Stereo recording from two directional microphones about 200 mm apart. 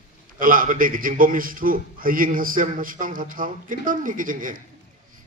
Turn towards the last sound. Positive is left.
turn(degrees=-40)  # may be behind; listen again after turning